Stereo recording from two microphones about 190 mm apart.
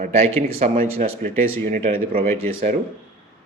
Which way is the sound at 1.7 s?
45° right (ahead or behind).